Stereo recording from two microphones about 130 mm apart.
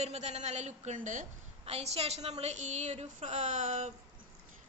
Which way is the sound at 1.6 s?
55° right (ahead or behind).